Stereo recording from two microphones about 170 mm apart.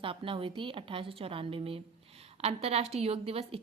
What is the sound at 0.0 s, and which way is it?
A woman's voice, 30° right (ahead or behind).